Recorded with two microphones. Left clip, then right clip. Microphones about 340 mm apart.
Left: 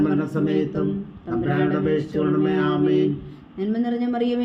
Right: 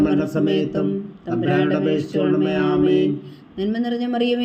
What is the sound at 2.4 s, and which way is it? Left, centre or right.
Speech, centre.